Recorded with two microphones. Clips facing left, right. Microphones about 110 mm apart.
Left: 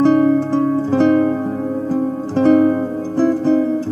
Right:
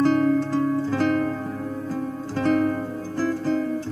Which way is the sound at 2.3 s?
25° left (ahead or behind).